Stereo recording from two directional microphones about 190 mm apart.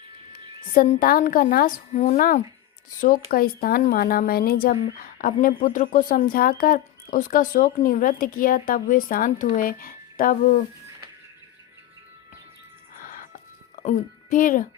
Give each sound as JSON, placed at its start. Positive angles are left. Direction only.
{"t": 0.6, "sound": "a woman's voice", "side_deg": 45}
{"t": 12.9, "sound": "music", "side_deg": 45}
{"t": 13.8, "sound": "a woman's voice", "side_deg": 40}